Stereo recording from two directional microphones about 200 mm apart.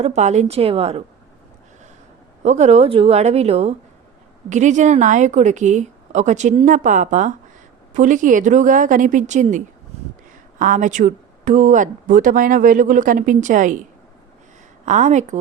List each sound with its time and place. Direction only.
0.0 s speech: 35° right (ahead or behind)
2.4 s speech: 35° right (ahead or behind)
14.8 s speech: 35° right (ahead or behind)